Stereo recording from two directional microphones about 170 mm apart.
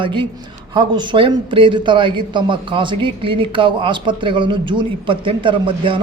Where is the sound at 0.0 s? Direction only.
30° right (ahead or behind).